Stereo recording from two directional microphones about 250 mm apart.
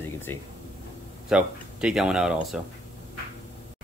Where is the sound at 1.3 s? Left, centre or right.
Centre.